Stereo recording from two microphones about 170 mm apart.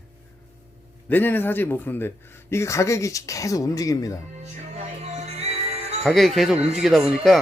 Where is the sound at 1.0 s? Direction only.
10° left (ahead or behind).